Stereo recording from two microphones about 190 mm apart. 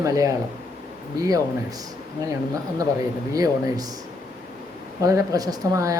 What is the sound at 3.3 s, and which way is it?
Speech, 20° right (ahead or behind).